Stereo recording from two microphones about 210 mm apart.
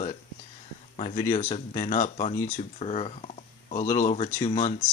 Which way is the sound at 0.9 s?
30° left (ahead or behind).